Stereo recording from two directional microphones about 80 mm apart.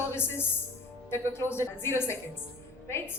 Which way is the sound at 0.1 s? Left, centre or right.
Left.